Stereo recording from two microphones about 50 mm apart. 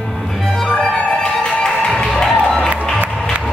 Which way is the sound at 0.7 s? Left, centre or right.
Left.